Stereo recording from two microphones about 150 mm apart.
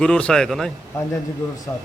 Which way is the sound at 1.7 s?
20° left (ahead or behind).